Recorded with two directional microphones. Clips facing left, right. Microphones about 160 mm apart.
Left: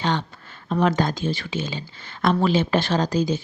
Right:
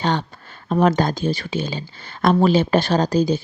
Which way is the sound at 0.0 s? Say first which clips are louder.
Right 3 dB; 40° right (ahead or behind).